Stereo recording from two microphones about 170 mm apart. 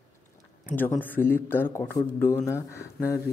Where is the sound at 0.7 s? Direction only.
10° left (ahead or behind).